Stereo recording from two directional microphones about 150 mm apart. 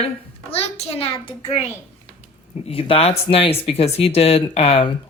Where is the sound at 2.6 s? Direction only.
40° left (ahead or behind).